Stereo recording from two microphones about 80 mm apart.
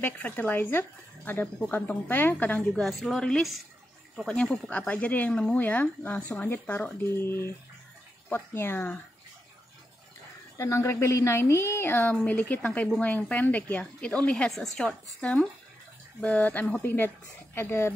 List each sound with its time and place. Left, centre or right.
0.0 s speech: left
2.7 s a woman's voice: centre; by 8.9 s left
10.6 s a woman's voice: left